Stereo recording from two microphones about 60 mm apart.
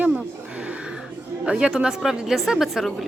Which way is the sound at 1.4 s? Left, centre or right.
Centre.